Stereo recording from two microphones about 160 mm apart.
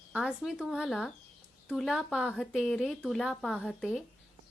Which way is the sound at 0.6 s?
5° right (ahead or behind).